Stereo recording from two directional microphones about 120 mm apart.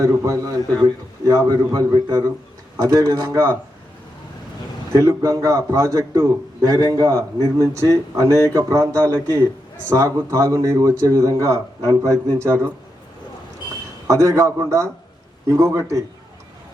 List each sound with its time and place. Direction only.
0.0 s a man's voice: 25° right (ahead or behind)
4.9 s a man's voice: 30° right (ahead or behind)
14.1 s a man's voice: 25° right (ahead or behind)